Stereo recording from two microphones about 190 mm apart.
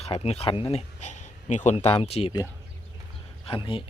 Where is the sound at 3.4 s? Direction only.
25° left (ahead or behind).